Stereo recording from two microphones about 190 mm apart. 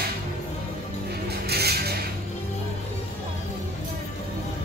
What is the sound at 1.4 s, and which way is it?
Music, 55° right (ahead or behind).